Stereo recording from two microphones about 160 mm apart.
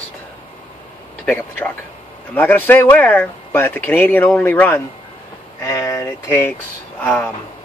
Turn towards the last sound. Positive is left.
turn(degrees=5)  # may be behind; listen again after turning